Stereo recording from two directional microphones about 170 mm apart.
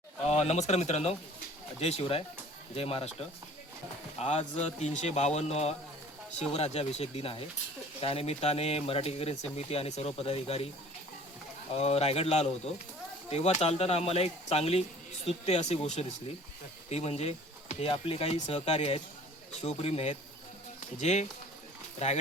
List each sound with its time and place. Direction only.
0.3 s a sound: 40° left (ahead or behind)
0.7 s speech: 40° left (ahead or behind)
11.7 s speech: 35° left (ahead or behind)